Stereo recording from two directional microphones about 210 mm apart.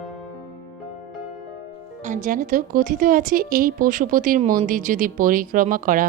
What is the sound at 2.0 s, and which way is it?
A woman's voice, 40° right (ahead or behind).